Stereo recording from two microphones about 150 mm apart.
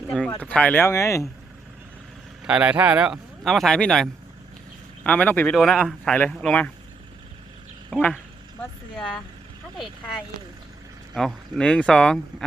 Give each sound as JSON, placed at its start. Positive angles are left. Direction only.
{"t": 0.3, "sound": "speech", "side_deg": 10}
{"t": 2.5, "sound": "speech", "side_deg": -10}
{"t": 5.5, "sound": "speech", "side_deg": 0}
{"t": 7.9, "sound": "speech", "side_deg": -5}
{"t": 9.7, "sound": "speech", "side_deg": 0}